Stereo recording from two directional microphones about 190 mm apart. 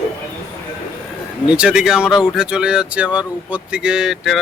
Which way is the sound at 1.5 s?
5° right (ahead or behind).